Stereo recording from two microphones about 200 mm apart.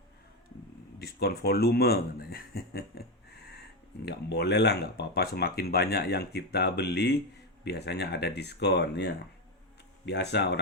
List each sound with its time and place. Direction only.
0.9 s speech: 50° left (ahead or behind)
4.0 s speech: 55° left (ahead or behind)